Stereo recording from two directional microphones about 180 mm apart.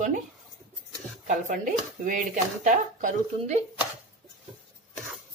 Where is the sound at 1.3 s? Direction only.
45° right (ahead or behind).